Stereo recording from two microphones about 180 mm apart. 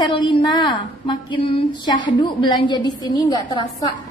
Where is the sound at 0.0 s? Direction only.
25° left (ahead or behind).